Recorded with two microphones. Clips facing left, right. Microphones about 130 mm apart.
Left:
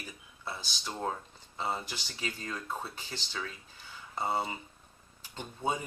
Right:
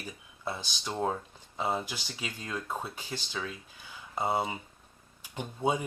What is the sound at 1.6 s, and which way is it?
Speech, 15° right (ahead or behind).